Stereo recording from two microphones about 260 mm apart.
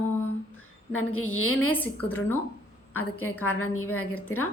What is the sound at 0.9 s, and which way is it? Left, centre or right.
Speech, left.